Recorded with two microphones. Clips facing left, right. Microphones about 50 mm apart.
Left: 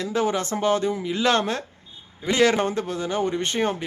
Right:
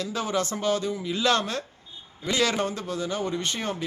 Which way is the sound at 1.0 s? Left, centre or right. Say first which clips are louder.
Even; left.